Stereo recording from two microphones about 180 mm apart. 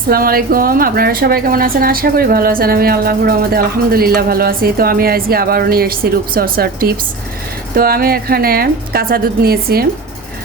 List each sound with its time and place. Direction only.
0.1 s a woman's voice: 55° right (ahead or behind)